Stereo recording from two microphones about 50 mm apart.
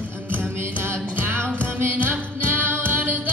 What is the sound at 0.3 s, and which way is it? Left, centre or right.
Music, right.